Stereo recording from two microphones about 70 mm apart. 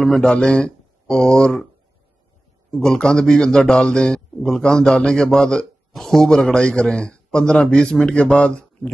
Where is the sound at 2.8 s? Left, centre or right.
Centre.